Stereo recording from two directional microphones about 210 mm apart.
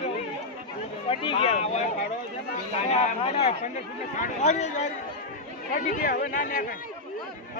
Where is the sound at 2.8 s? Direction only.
30° left (ahead or behind).